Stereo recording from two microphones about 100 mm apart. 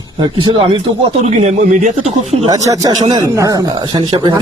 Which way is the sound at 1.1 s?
90° right.